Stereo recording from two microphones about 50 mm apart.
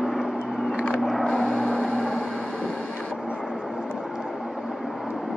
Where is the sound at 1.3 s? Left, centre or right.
Centre.